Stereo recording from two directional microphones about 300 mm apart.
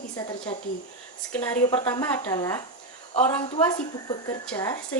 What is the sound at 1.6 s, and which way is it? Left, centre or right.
A woman's voice, centre.